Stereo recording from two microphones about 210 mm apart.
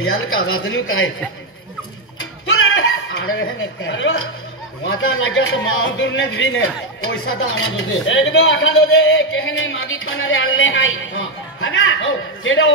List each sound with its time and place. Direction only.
0.0 s a man's voice: 80° left
2.4 s chuckle: 70° left (ahead or behind)
4.8 s a man's voice: 75° left (ahead or behind)